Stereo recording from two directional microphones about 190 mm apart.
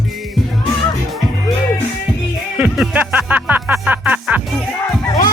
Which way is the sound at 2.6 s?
5° right (ahead or behind).